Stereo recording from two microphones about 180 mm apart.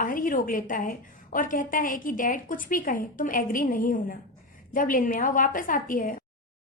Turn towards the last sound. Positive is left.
turn(degrees=50)  # may be behind; listen again after turning